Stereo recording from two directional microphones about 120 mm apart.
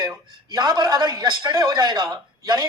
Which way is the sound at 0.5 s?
35° right (ahead or behind).